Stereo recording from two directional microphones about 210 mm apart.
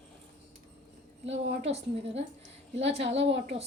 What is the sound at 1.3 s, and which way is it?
A woman's voice, 30° right (ahead or behind).